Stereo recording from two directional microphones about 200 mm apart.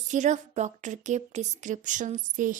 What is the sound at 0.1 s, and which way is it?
Speech, 35° right (ahead or behind).